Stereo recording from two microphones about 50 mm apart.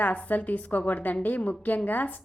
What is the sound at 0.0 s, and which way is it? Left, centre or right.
A woman's voice, left.